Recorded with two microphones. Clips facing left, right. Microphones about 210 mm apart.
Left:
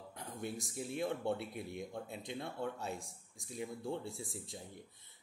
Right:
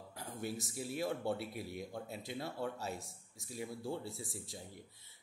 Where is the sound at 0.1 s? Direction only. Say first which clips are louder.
Right 1 dB; 5° right (ahead or behind).